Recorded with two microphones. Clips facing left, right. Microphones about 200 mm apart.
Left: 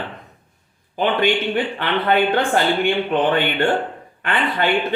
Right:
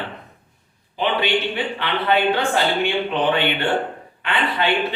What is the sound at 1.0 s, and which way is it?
A man's voice, 50° left (ahead or behind).